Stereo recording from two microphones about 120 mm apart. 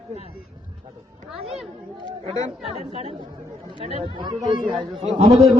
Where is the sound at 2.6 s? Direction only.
55° right (ahead or behind).